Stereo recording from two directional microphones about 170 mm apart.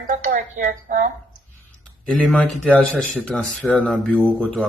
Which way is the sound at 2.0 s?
5° left (ahead or behind).